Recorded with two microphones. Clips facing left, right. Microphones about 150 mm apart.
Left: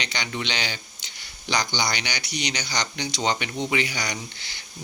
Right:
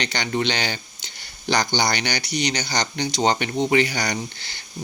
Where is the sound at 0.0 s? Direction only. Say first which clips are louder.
Right 7 dB; 50° right (ahead or behind).